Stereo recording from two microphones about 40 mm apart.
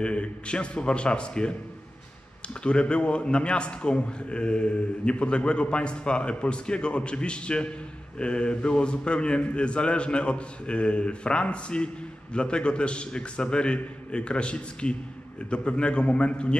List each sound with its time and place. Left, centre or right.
0.0 s a man's voice: left